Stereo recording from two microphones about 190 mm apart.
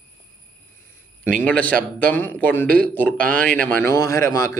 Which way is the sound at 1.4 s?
10° left (ahead or behind).